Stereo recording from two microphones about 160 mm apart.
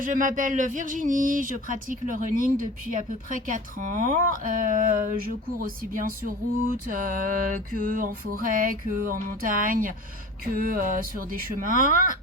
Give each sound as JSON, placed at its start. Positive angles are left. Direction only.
{"t": 0.0, "sound": "speech", "side_deg": -55}